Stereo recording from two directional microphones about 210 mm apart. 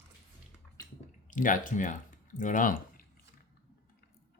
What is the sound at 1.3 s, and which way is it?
Speech, 40° left (ahead or behind).